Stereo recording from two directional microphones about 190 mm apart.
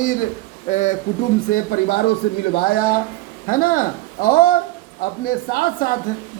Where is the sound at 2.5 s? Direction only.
55° left (ahead or behind).